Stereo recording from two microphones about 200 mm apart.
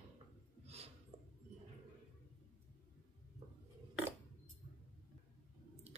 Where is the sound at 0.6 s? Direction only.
30° right (ahead or behind).